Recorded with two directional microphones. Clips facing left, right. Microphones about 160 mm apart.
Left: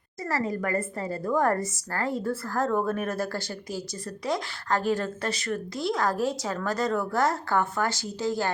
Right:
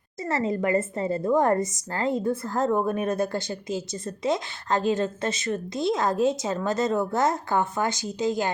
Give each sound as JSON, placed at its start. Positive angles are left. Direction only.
{"t": 0.2, "sound": "a woman's voice", "side_deg": -25}